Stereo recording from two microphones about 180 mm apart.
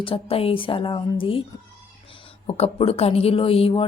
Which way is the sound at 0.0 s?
30° left (ahead or behind).